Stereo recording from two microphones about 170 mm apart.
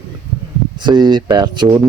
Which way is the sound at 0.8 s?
25° right (ahead or behind).